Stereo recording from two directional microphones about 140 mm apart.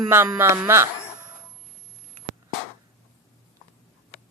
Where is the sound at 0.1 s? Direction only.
15° right (ahead or behind).